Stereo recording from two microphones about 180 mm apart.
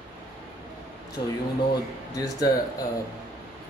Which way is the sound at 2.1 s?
20° left (ahead or behind).